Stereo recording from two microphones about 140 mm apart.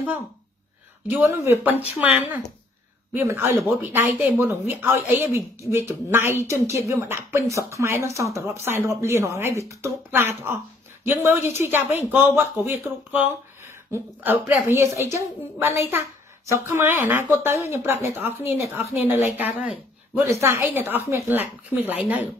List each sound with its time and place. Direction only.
1.1 s a woman's voice: 20° right (ahead or behind)
3.2 s a woman's voice: 20° right (ahead or behind)
14.7 s a woman's voice: 20° right (ahead or behind)